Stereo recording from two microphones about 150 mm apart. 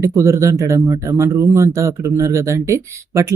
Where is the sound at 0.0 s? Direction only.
20° right (ahead or behind).